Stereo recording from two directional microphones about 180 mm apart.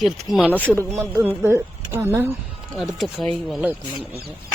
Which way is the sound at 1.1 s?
15° right (ahead or behind).